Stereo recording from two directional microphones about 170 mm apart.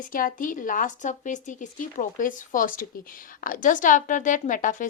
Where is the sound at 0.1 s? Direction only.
55° left (ahead or behind).